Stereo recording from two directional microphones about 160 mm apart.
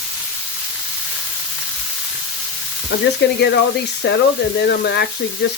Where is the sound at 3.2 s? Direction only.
90° left.